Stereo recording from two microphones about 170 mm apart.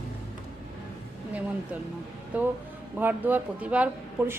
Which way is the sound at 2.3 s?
10° right (ahead or behind).